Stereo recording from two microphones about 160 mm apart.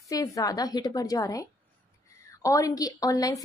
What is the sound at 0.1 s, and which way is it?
A woman's voice, 20° left (ahead or behind).